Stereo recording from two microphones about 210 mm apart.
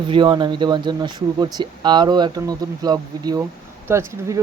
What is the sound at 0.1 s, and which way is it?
Speech, 20° right (ahead or behind).